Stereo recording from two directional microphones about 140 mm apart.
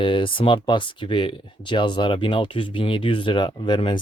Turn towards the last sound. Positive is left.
turn(degrees=35)  # may be behind; listen again after turning